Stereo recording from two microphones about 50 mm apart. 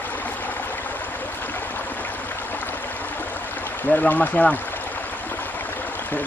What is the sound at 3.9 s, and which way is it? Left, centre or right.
Speech, left.